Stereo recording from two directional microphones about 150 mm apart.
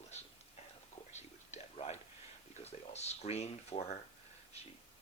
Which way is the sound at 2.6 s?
45° left (ahead or behind).